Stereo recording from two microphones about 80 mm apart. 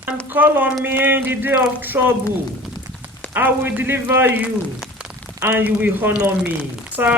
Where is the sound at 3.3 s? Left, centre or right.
Right.